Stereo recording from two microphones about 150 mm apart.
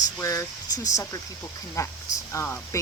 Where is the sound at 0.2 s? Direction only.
20° left (ahead or behind).